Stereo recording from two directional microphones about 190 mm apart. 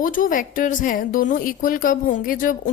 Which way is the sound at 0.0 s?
45° left (ahead or behind).